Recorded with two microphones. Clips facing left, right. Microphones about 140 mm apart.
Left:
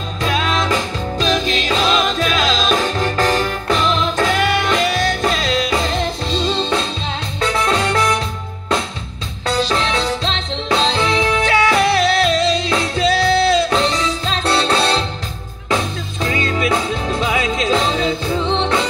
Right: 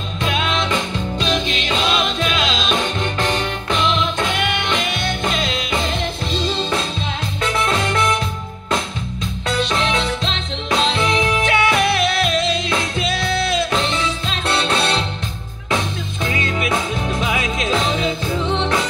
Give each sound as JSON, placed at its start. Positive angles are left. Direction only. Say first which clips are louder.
{"t": 0.2, "sound": "music", "louder": "left 2 dB", "side_deg": 40}
{"t": 9.5, "sound": "music", "louder": "left 2 dB", "side_deg": 35}